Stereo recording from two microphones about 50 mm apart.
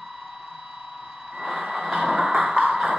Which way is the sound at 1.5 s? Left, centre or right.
Centre.